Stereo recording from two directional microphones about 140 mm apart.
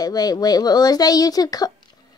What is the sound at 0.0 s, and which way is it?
Speech, 30° left (ahead or behind).